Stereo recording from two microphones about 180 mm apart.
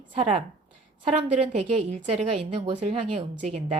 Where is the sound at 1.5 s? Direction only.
40° right (ahead or behind).